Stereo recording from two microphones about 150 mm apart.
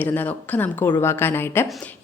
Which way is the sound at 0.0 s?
10° left (ahead or behind).